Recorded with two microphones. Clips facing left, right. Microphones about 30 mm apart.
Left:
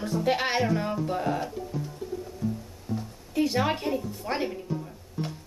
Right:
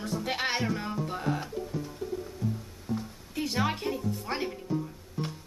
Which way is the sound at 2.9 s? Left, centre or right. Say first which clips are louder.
Even; centre.